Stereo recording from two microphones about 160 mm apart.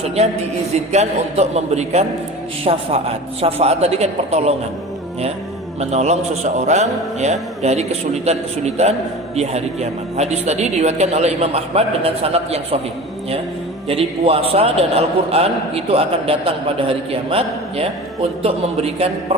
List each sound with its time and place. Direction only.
0.9 s a man's voice: 45° right (ahead or behind)
5.8 s a man's voice: 45° right (ahead or behind)
13.8 s a man's voice: 35° right (ahead or behind)